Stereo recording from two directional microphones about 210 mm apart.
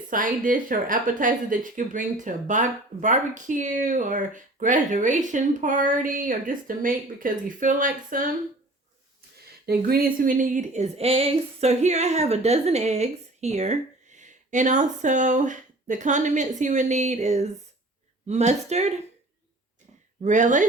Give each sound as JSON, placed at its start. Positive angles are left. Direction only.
{"t": 0.1, "sound": "speech", "side_deg": -40}
{"t": 9.6, "sound": "speech", "side_deg": -45}
{"t": 20.2, "sound": "speech", "side_deg": -35}